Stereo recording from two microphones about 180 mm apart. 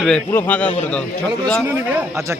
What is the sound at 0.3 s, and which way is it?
Speech, 10° left (ahead or behind).